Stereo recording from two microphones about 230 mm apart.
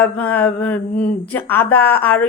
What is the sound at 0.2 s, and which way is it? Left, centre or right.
A woman's voice, centre.